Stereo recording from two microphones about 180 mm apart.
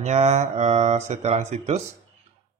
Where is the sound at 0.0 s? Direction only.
40° right (ahead or behind).